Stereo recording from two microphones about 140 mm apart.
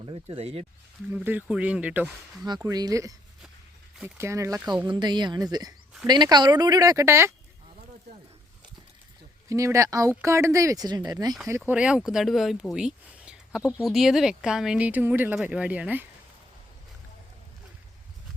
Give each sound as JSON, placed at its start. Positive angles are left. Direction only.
{"t": 0.3, "sound": "speech", "side_deg": -45}
{"t": 1.1, "sound": "speech", "side_deg": -10}
{"t": 2.6, "sound": "speech", "side_deg": -25}
{"t": 4.2, "sound": "speech", "side_deg": -20}
{"t": 4.9, "sound": "speech", "side_deg": -35}
{"t": 9.5, "sound": "speech", "side_deg": -20}
{"t": 11.7, "sound": "speech", "side_deg": -5}